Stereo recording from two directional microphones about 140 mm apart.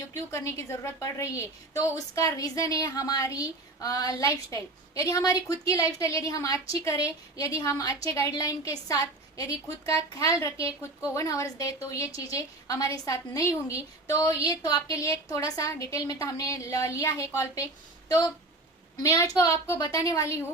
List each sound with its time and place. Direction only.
0.1 s a woman's voice: 20° left (ahead or behind)
19.0 s a woman's voice: 25° left (ahead or behind)